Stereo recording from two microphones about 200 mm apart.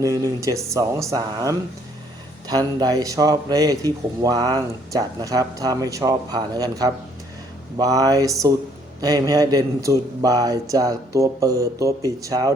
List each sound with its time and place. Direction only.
0.0 s speech: 15° right (ahead or behind)